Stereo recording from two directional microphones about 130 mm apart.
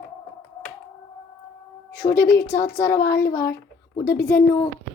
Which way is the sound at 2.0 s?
25° left (ahead or behind).